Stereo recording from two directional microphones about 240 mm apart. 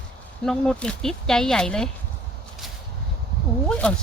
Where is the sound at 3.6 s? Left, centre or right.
Centre.